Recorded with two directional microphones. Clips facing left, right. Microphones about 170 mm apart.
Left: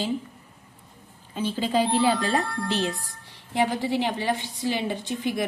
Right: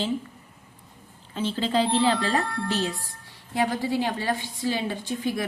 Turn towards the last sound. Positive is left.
turn(degrees=20)  # may be behind; listen again after turning